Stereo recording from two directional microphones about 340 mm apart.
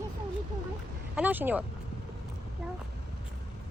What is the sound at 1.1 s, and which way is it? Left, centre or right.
Speech, centre.